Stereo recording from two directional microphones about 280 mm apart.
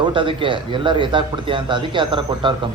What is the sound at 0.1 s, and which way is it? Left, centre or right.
A man's voice, centre.